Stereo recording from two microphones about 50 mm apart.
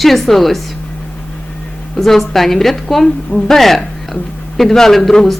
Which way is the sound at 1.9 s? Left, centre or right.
Centre.